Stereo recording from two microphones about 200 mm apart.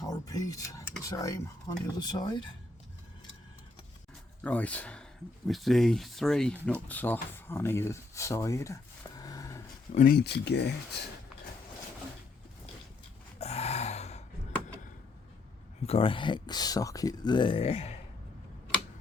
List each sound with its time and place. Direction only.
0.0 s a sound: 20° left (ahead or behind)
2.0 s speech: 20° left (ahead or behind)
4.4 s speech: 5° left (ahead or behind)
9.9 s speech: 45° left (ahead or behind)
13.4 s gasp: 30° left (ahead or behind)
15.9 s speech: 25° left (ahead or behind)